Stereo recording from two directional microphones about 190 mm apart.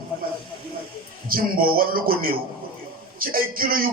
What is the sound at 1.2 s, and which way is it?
A man's voice, 50° right (ahead or behind).